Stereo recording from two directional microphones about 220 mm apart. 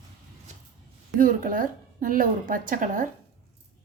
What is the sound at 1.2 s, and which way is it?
A woman's voice, 40° right (ahead or behind).